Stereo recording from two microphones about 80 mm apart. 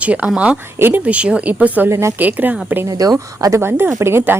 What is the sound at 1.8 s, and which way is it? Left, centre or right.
Speech, right.